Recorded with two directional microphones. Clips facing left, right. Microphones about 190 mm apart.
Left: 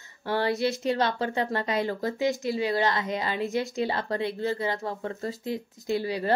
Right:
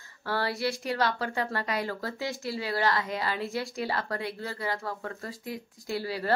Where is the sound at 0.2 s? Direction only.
20° left (ahead or behind).